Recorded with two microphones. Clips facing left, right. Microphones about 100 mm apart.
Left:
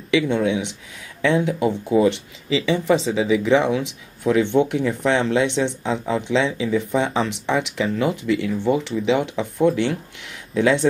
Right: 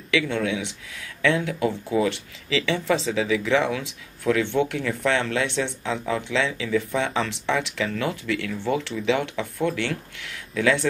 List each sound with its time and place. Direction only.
0.1 s speech: 20° left (ahead or behind)